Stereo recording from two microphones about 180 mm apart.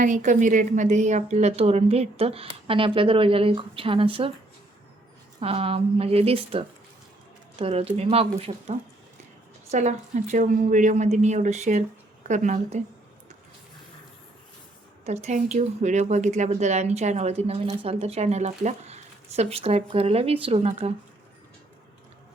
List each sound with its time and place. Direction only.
0.0 s speech: 45° right (ahead or behind); by 4.3 s 30° right (ahead or behind)
5.4 s a woman's voice: 30° right (ahead or behind)
15.0 s speech: 35° right (ahead or behind)